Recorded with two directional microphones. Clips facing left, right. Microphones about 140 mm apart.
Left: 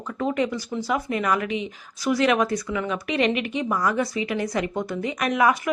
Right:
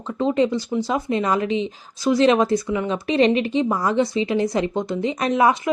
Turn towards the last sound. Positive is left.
turn(degrees=-25)  # may be behind; listen again after turning